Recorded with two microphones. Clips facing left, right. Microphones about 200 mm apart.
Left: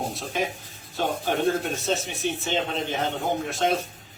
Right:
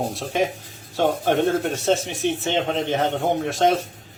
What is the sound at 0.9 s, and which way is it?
Speech, 80° right.